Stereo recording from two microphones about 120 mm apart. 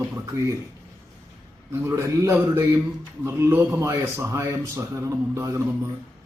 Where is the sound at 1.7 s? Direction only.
20° right (ahead or behind).